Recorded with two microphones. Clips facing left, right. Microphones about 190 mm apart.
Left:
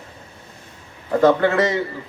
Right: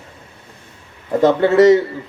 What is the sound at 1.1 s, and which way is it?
Speech, 20° right (ahead or behind).